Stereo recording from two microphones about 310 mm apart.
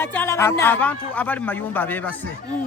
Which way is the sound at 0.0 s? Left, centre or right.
Centre.